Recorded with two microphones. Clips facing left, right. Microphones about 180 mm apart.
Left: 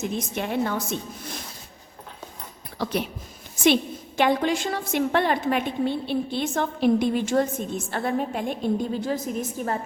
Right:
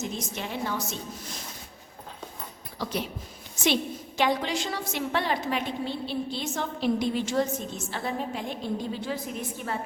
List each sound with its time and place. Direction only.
0.0 s a woman's voice: 55° left (ahead or behind)
2.7 s speech: 60° left (ahead or behind)
4.2 s a woman's voice: 50° left (ahead or behind)